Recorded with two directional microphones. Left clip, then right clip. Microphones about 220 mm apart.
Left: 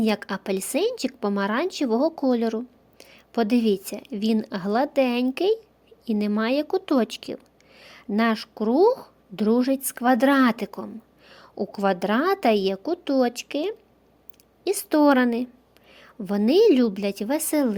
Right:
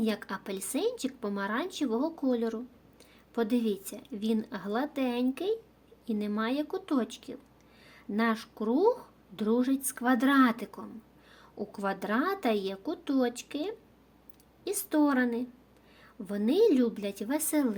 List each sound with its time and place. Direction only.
0.0 s a woman's voice: 35° left (ahead or behind)
7.8 s a sound: 45° left (ahead or behind)
8.5 s a woman's voice: 35° left (ahead or behind)
14.8 s a woman's voice: 45° left (ahead or behind)